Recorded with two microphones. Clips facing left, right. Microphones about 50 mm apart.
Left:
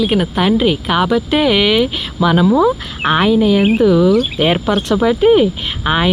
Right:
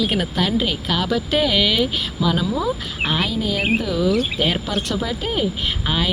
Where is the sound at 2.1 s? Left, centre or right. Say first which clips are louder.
Left 11 dB; left.